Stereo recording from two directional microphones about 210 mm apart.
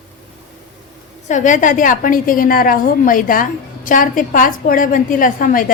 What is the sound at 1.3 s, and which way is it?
A woman's voice, 35° left (ahead or behind).